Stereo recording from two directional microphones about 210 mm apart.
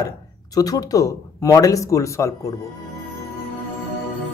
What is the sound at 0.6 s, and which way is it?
Speech, 15° left (ahead or behind).